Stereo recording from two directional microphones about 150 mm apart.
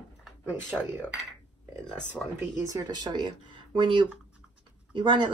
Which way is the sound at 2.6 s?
25° right (ahead or behind).